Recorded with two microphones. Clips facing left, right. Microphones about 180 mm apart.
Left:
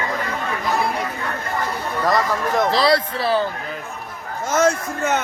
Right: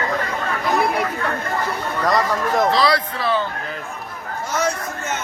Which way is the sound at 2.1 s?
Centre (ahead or behind).